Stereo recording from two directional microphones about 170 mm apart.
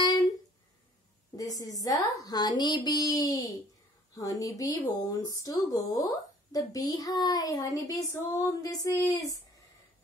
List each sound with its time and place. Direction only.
1.3 s speech: 20° left (ahead or behind)